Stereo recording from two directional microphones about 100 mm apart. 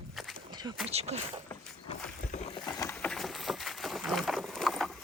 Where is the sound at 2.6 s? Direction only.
45° left (ahead or behind).